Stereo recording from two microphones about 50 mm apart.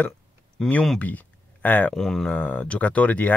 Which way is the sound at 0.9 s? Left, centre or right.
Left.